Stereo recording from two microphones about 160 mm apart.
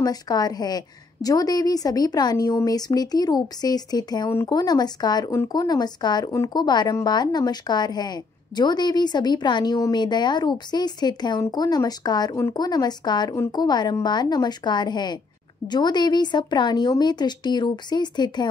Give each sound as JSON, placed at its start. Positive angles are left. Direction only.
{"t": 0.0, "sound": "a woman's voice", "side_deg": 25}